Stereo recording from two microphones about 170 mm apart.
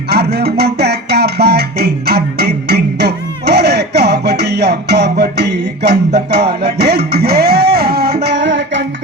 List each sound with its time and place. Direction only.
0.1 s music: 75° right (ahead or behind); by 8.8 s 90° right